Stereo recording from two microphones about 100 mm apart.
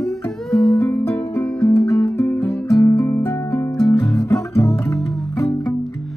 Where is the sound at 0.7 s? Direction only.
20° left (ahead or behind).